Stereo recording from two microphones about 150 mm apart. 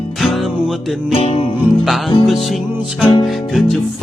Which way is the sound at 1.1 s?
40° left (ahead or behind).